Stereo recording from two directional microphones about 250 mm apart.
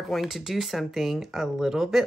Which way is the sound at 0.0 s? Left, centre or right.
Centre.